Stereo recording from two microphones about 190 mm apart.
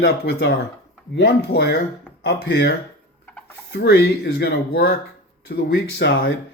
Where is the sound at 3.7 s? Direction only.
60° left (ahead or behind).